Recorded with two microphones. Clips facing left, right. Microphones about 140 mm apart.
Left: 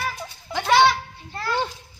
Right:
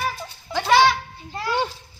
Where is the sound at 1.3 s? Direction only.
15° right (ahead or behind).